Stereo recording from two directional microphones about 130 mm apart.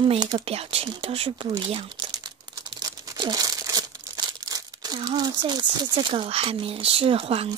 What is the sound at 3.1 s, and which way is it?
Crumpling, 30° right (ahead or behind).